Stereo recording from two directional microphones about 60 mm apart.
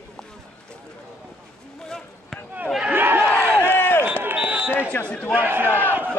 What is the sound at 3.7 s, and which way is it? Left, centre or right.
Run, left.